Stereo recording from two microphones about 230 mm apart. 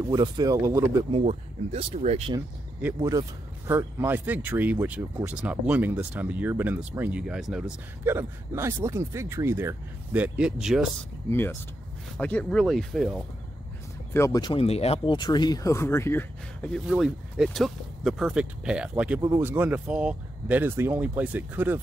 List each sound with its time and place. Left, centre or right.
0.0 s speech: centre
1.1 s speech: right
2.8 s speech: centre
11.2 s speech: centre
14.1 s speech: centre